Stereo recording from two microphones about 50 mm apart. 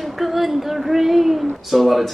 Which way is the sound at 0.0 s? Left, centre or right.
Centre.